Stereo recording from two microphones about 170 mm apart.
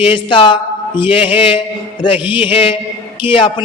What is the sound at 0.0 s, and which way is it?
A man's voice, 30° left (ahead or behind).